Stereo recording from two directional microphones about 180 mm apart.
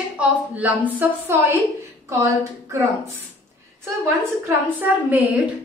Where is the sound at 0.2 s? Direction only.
10° right (ahead or behind).